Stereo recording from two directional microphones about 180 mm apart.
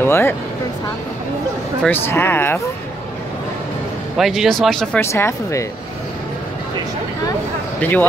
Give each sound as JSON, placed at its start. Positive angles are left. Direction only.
{"t": 0.0, "sound": "speech", "side_deg": 10}
{"t": 1.8, "sound": "speech", "side_deg": 10}
{"t": 4.2, "sound": "speech", "side_deg": 0}
{"t": 5.0, "sound": "speech", "side_deg": 15}
{"t": 7.8, "sound": "speech", "side_deg": 10}